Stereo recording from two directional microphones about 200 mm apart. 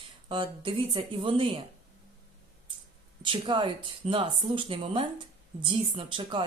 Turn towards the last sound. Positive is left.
turn(degrees=-25)  # may be behind; listen again after turning